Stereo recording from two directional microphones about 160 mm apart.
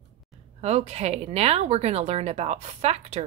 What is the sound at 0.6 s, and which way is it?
A woman's voice, 40° right (ahead or behind).